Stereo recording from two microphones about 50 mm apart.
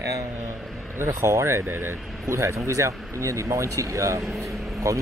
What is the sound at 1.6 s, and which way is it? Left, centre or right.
Speech, right.